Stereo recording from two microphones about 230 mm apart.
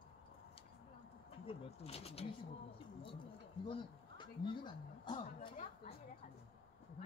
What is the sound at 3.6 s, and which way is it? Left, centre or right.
Speech, left.